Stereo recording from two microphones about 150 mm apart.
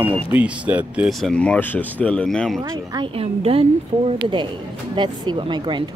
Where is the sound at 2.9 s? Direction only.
40° right (ahead or behind).